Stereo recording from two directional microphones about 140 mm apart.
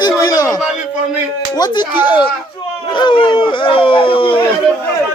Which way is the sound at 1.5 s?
30° left (ahead or behind).